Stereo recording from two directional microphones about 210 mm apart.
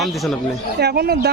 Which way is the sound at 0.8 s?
50° right (ahead or behind).